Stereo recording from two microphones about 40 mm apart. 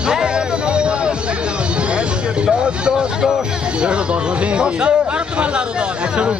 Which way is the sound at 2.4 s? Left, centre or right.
Right.